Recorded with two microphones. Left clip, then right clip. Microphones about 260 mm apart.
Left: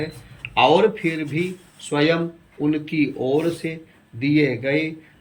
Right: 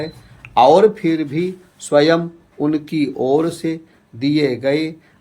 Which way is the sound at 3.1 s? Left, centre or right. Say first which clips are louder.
Right 4 dB; right.